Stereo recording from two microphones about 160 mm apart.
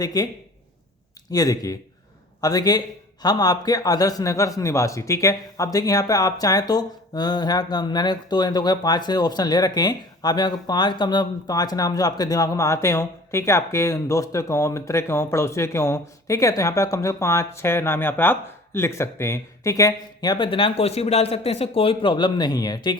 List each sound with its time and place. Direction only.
0.0 s a man's voice: 25° left (ahead or behind)
1.3 s a man's voice: 25° left (ahead or behind)